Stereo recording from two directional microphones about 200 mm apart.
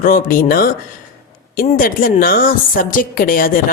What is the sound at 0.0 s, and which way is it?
Speech, 45° left (ahead or behind).